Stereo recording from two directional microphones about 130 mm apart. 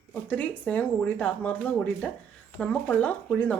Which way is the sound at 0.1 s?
10° left (ahead or behind).